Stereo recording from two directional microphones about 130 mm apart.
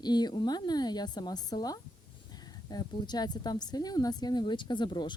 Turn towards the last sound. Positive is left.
turn(degrees=35)  # may be behind; listen again after turning